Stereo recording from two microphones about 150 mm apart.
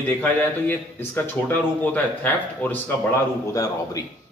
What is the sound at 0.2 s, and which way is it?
Speech, 15° left (ahead or behind).